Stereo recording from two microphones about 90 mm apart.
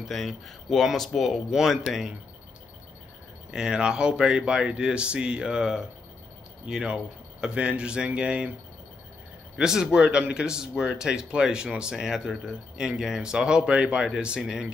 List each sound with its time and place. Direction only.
0.1 s speech: centre (ahead or behind)
3.5 s speech: 5° right (ahead or behind)
9.6 s speech: 5° right (ahead or behind)